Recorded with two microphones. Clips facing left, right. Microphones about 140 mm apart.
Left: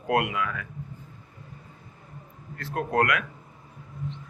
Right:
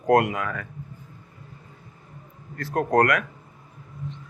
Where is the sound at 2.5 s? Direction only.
40° right (ahead or behind).